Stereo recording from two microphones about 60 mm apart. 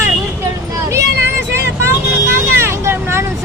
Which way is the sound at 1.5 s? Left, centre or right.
Right.